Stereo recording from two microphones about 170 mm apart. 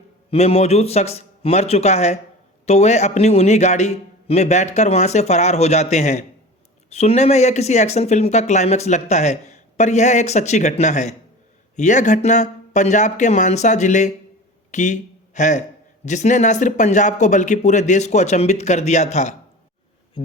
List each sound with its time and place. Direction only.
0.3 s a man's voice: 35° left (ahead or behind)